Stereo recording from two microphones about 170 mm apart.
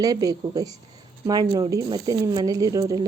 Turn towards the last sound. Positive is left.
turn(degrees=-20)  # may be behind; listen again after turning